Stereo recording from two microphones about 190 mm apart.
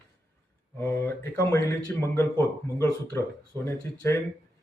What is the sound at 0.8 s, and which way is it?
Speech, 15° left (ahead or behind).